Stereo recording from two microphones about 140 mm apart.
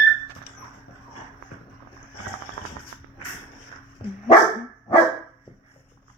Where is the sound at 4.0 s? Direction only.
45° left (ahead or behind).